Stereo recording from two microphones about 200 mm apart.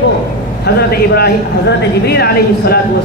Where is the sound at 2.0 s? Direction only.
55° left (ahead or behind).